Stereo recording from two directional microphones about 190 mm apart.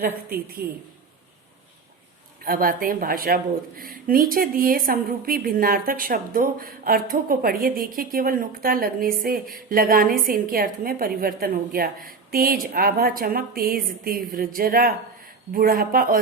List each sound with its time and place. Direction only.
0.0 s speech: 50° right (ahead or behind)
2.4 s speech: 50° right (ahead or behind)